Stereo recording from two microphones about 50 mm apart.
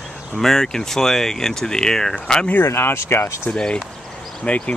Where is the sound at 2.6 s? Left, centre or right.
Left.